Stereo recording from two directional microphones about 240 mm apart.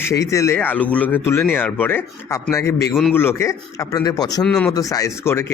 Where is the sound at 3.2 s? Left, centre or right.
Centre.